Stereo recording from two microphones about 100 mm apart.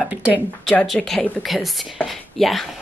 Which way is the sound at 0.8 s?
Centre (ahead or behind).